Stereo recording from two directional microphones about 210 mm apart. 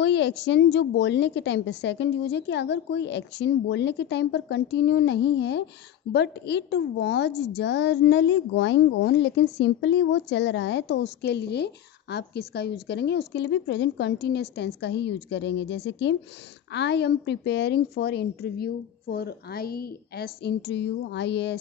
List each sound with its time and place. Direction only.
0.0 s a woman's voice: 55° left (ahead or behind)